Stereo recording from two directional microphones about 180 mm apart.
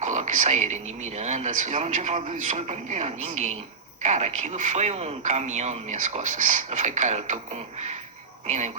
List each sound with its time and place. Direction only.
0.0 s a man's voice: 40° right (ahead or behind)